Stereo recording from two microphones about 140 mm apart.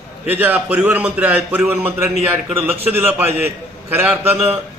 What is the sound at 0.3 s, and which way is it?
A man's voice, 10° right (ahead or behind).